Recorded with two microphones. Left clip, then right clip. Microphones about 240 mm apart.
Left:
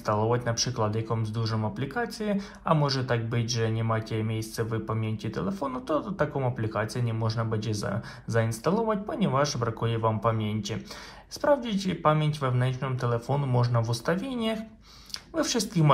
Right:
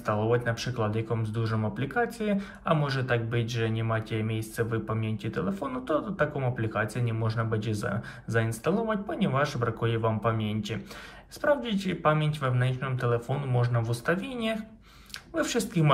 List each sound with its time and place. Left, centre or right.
0.0 s speech: centre